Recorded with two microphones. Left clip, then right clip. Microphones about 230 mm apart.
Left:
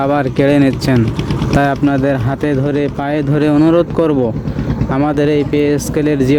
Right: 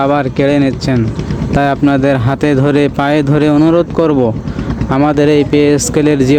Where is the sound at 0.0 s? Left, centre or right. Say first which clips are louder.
Right 2 dB; centre.